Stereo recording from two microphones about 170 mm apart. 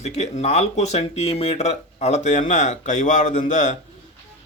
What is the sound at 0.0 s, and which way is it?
A man's voice, 40° left (ahead or behind).